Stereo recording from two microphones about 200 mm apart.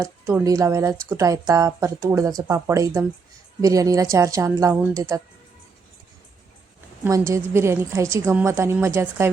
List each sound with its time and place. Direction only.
0.0 s a woman's voice: 15° right (ahead or behind)
7.0 s a woman's voice: 10° right (ahead or behind)